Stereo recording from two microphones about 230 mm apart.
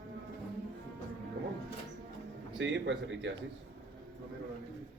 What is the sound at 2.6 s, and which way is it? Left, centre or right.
Speech, right.